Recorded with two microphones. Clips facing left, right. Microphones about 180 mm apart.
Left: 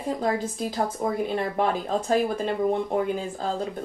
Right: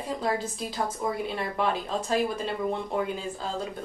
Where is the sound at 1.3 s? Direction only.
50° left (ahead or behind).